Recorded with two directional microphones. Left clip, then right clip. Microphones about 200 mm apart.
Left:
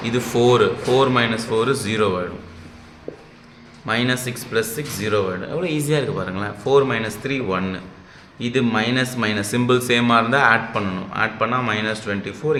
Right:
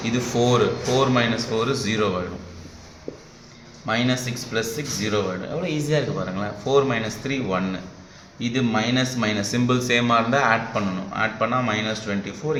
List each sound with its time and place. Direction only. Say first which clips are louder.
0.0 s speech: left 4 dB; 25° left (ahead or behind)
3.8 s speech: left 2 dB; 25° left (ahead or behind)